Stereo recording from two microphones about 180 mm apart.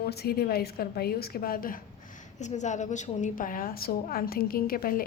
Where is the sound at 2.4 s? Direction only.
40° left (ahead or behind).